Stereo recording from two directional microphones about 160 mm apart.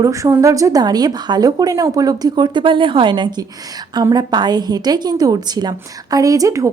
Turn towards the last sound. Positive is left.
turn(degrees=-20)  # may be behind; listen again after turning